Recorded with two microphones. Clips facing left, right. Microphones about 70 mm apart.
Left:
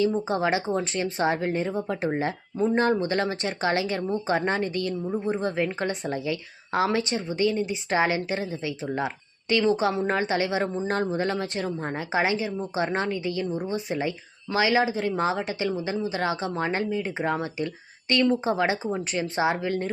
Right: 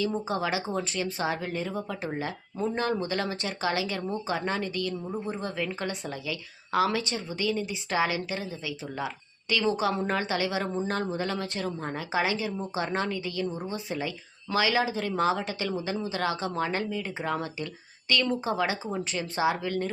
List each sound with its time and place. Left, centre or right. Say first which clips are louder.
0.3 s a woman's voice: left 5 dB; left